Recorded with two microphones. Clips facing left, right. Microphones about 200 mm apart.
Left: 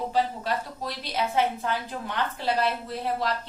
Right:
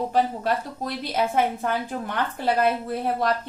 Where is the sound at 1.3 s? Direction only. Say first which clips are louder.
Right 2 dB; 50° right (ahead or behind).